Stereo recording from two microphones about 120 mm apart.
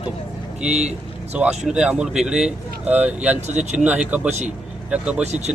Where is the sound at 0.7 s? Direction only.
65° right (ahead or behind).